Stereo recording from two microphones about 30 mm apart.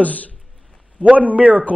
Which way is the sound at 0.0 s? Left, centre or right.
Left.